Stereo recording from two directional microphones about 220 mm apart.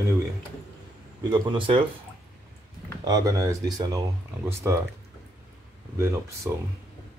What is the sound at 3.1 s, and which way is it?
Speech, 15° right (ahead or behind).